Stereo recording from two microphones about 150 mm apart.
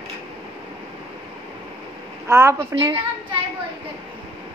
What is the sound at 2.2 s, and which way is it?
Speech, 20° right (ahead or behind).